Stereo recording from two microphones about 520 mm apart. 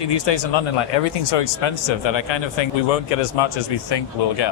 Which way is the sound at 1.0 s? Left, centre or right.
Left.